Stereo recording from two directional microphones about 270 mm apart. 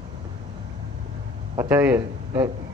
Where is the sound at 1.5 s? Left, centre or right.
Centre.